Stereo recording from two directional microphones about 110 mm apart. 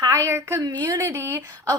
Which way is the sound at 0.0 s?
30° right (ahead or behind).